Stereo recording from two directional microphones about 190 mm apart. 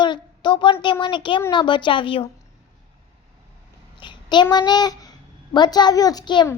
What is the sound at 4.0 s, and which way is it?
A child's voice, 25° left (ahead or behind).